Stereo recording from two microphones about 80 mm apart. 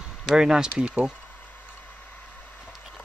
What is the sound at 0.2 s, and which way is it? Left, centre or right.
Speech, centre.